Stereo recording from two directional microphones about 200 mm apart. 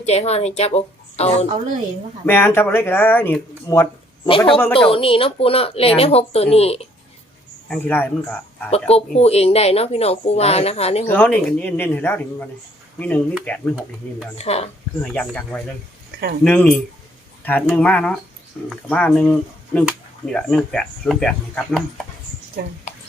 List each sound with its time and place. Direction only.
0.0 s a woman's voice: 30° left (ahead or behind)
2.2 s speech: 10° left (ahead or behind)
4.3 s speech: 25° left (ahead or behind)
7.7 s speech: 10° left (ahead or behind)
8.9 s speech: 30° left (ahead or behind)
11.0 s speech: 10° left (ahead or behind)
14.3 s speech: 30° left (ahead or behind)
15.0 s speech: 5° left (ahead or behind)
22.6 s speech: 50° right (ahead or behind)